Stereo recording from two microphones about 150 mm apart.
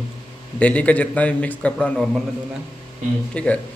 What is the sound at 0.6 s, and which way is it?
Speech, 10° left (ahead or behind).